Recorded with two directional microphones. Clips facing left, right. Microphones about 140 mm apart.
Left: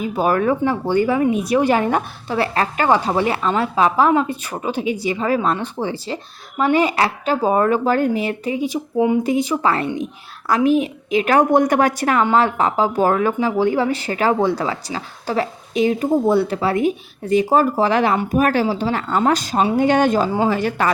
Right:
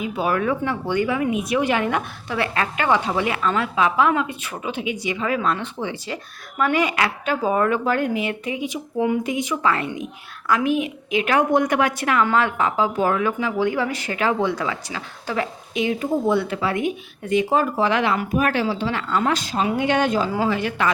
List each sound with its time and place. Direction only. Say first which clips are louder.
0.0 s speech: left 4 dB; 40° left (ahead or behind)